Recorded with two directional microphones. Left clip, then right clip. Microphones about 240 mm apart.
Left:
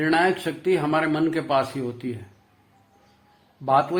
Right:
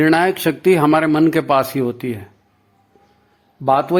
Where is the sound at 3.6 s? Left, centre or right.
Right.